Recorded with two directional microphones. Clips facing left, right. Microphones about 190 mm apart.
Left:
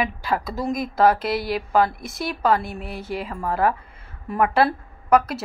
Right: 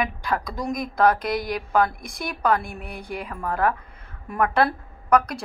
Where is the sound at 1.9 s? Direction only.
25° left (ahead or behind).